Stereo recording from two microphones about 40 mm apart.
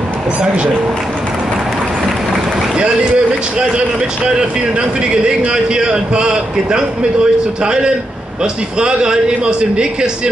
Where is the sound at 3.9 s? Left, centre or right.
Right.